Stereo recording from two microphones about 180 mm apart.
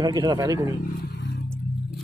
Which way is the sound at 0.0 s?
20° right (ahead or behind).